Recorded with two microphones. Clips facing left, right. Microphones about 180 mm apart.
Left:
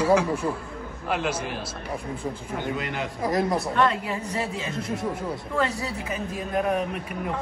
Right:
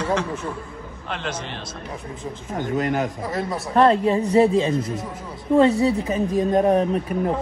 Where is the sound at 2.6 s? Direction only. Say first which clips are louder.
Right 8 dB; 45° right (ahead or behind).